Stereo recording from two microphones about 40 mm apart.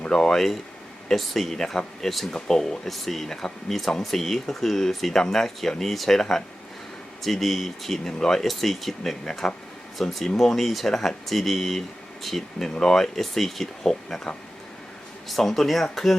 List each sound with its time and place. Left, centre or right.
0.1 s speech: centre
7.2 s speech: centre
15.3 s speech: centre